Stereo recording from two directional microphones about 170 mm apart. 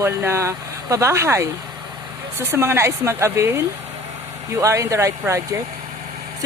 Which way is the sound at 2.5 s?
15° right (ahead or behind).